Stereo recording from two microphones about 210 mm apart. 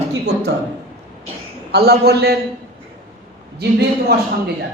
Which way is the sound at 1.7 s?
50° right (ahead or behind).